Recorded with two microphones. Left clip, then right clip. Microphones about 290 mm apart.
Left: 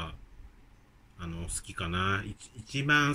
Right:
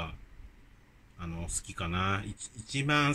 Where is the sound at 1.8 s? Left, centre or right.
Centre.